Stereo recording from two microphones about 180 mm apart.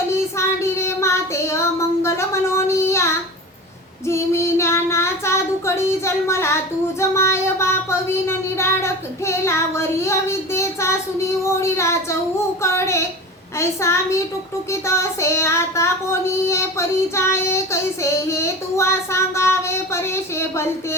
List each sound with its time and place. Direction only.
0.1 s child singing: 15° left (ahead or behind)